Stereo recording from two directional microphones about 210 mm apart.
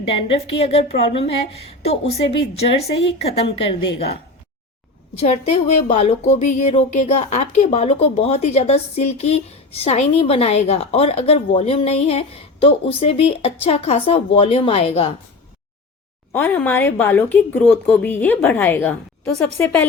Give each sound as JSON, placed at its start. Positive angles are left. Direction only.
{"t": 0.1, "sound": "speech", "side_deg": 30}
{"t": 5.9, "sound": "speech", "side_deg": 30}
{"t": 16.3, "sound": "speech", "side_deg": 10}